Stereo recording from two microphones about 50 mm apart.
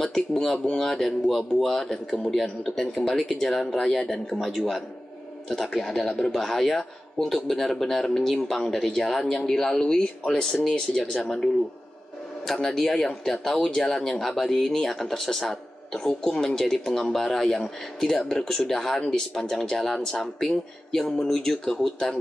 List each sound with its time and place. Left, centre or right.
0.0 s speech: centre
12.6 s speech: centre